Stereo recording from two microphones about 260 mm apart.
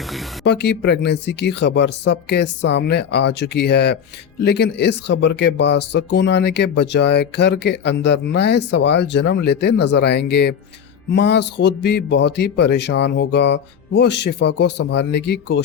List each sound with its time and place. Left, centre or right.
0.4 s speech: left